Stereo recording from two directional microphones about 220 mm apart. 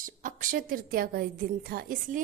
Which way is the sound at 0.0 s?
35° right (ahead or behind).